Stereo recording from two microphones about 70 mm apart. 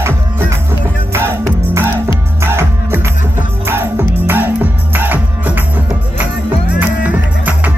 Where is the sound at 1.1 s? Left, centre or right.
Right.